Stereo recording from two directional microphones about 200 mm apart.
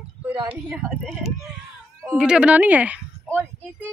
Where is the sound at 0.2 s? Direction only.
10° right (ahead or behind).